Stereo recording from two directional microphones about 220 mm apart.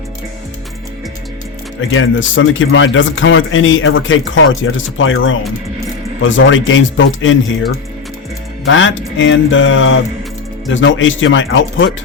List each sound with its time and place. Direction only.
1.9 s a man's voice: 60° left (ahead or behind)
8.6 s a man's voice: 60° left (ahead or behind)